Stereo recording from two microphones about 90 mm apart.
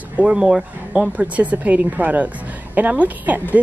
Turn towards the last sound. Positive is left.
turn(degrees=-20)  # may be behind; listen again after turning